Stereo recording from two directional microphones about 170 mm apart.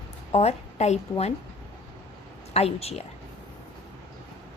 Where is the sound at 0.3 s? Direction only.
40° left (ahead or behind).